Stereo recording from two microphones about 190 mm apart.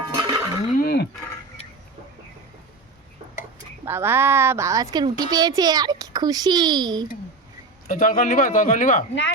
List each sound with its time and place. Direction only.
0.0 s a sound: 25° right (ahead or behind)
0.8 s cutlery: 55° left (ahead or behind)
3.8 s a woman's voice: 10° right (ahead or behind)
7.9 s speech: 50° left (ahead or behind)